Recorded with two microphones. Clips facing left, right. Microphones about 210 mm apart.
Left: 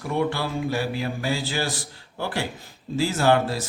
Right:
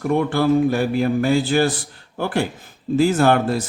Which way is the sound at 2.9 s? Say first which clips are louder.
Right 5 dB; 55° right (ahead or behind).